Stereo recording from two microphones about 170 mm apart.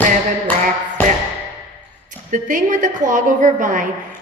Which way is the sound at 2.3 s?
50° right (ahead or behind).